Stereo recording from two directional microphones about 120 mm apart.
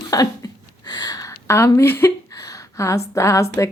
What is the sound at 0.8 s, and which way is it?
Speech, 35° left (ahead or behind).